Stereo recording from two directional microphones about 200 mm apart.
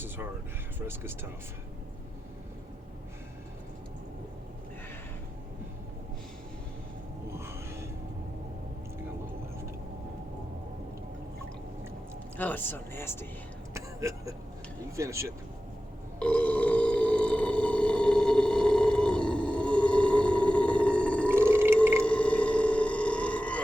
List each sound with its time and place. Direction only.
0.8 s speech: 10° right (ahead or behind)
7.3 s a sound: 10° right (ahead or behind)
12.4 s speech: 10° left (ahead or behind)
13.7 s a sound: 15° right (ahead or behind)
14.9 s speech: 15° right (ahead or behind)
16.2 s burping: 5° left (ahead or behind)
21.2 s burping: 10° right (ahead or behind)
22.0 s burping: 5° left (ahead or behind)